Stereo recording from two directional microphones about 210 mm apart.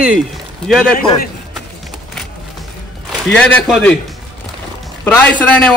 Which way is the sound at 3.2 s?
5° left (ahead or behind).